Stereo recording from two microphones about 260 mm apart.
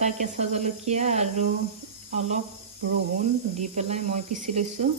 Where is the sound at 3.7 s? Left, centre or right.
Right.